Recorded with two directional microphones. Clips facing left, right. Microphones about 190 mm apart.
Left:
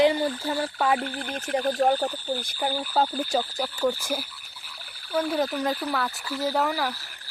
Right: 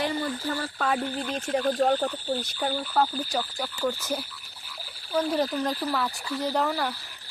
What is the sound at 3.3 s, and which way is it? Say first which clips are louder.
Speech: left 4 dB; 25° left (ahead or behind).